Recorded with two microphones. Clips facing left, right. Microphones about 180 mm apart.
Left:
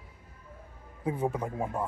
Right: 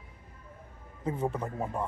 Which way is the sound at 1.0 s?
10° left (ahead or behind).